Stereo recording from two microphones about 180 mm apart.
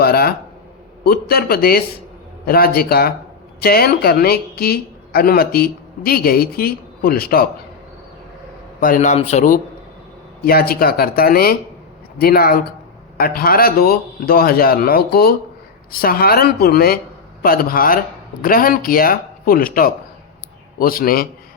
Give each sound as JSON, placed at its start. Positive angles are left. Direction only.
{"t": 0.0, "sound": "a sound", "side_deg": 60}
{"t": 1.0, "sound": "a woman's voice", "side_deg": 60}
{"t": 8.8, "sound": "speech", "side_deg": 45}
{"t": 10.4, "sound": "a woman's voice", "side_deg": 55}